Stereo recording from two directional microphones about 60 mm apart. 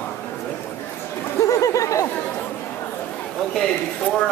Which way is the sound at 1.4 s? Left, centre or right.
Left.